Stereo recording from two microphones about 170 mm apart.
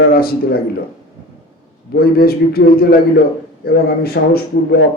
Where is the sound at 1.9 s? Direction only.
65° left (ahead or behind).